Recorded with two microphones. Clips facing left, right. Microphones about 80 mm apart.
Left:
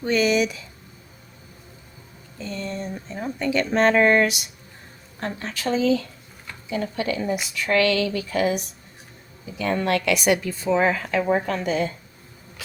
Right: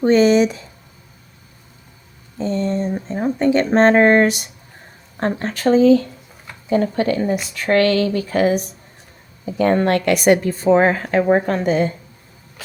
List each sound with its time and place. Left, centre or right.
0.0 s speech: right
2.4 s speech: right
2.9 s speech: right